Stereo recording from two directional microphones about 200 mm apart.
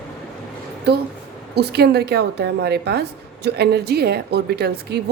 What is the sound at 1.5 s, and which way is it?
A woman's voice, 55° right (ahead or behind).